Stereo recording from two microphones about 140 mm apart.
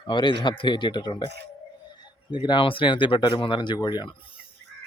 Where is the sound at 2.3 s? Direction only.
35° left (ahead or behind).